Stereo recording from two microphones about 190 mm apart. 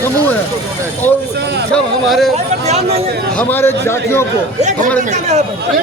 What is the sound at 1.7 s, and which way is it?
Speech, centre (ahead or behind).